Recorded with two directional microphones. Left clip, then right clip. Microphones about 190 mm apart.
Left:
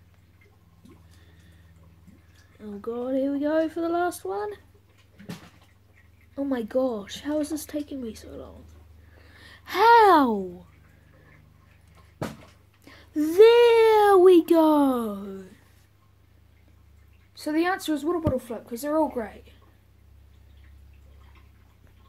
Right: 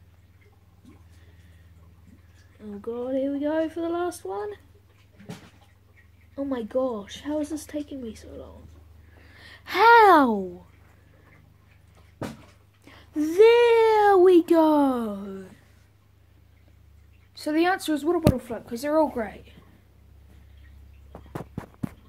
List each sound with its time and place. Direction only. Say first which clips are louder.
2.6 s speech: even; 35° left (ahead or behind)
6.3 s speech: left 1 dB; 35° left (ahead or behind)
9.2 s speech: right 2 dB; 10° left (ahead or behind)
12.8 s speech: left 1 dB; 30° left (ahead or behind); by 15.4 s 10° left (ahead or behind)
17.3 s speech: right 2 dB; 5° left (ahead or behind)